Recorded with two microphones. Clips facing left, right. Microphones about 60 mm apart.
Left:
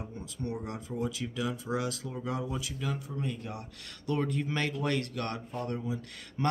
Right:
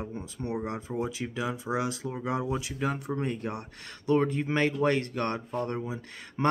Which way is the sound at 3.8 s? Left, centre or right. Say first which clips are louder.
Right 7 dB; right.